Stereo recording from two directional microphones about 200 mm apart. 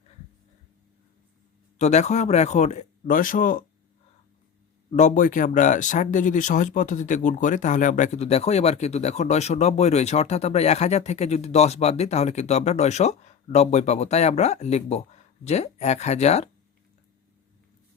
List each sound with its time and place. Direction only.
1.8 s speech: 35° left (ahead or behind)
4.9 s speech: 35° left (ahead or behind)